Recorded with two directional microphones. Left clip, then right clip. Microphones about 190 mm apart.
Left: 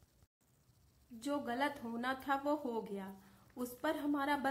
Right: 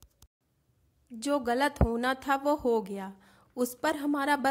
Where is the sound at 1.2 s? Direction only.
40° right (ahead or behind).